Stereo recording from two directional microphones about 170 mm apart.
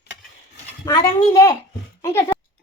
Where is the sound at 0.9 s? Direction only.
25° left (ahead or behind).